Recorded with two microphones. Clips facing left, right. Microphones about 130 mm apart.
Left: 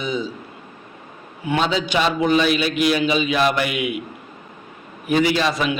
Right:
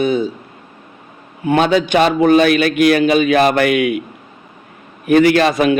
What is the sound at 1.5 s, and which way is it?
A man's voice, 55° right (ahead or behind).